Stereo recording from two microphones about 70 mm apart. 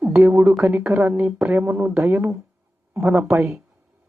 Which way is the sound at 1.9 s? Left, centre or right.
Right.